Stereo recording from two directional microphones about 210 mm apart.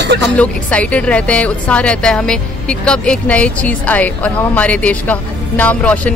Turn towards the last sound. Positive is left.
turn(degrees=5)  # may be behind; listen again after turning